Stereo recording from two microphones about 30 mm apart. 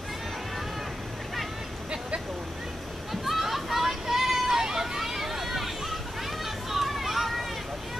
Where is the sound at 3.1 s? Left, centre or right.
Centre.